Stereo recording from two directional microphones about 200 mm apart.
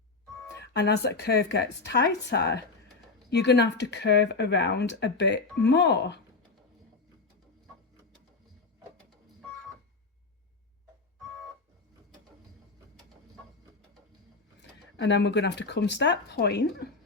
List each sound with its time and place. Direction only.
0.6 s speech: 55° left (ahead or behind)
14.6 s speech: 60° left (ahead or behind)